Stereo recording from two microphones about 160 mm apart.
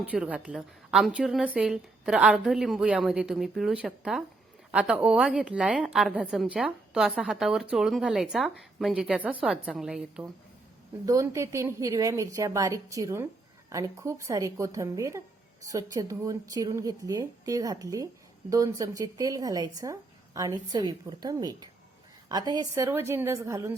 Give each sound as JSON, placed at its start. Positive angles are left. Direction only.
{"t": 0.0, "sound": "a woman's voice", "side_deg": -10}
{"t": 11.0, "sound": "a woman's voice", "side_deg": -20}